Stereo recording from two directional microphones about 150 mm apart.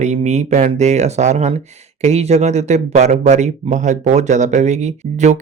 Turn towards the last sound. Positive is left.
turn(degrees=-50)  # may be behind; listen again after turning